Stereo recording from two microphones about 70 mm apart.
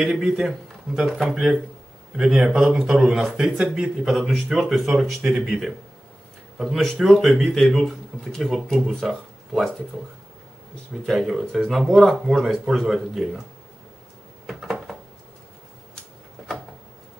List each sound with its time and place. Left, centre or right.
0.0 s speech: centre
2.1 s a man's voice: centre
11.1 s speech: centre
14.4 s a sound: centre